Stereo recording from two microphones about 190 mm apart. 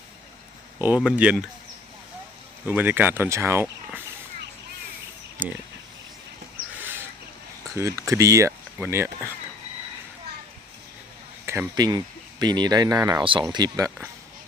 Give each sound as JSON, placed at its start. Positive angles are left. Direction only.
{"t": 0.8, "sound": "speech", "side_deg": -5}
{"t": 2.6, "sound": "speech", "side_deg": -10}
{"t": 5.4, "sound": "speech", "side_deg": -10}
{"t": 7.8, "sound": "speech", "side_deg": -15}
{"t": 11.4, "sound": "speech", "side_deg": -15}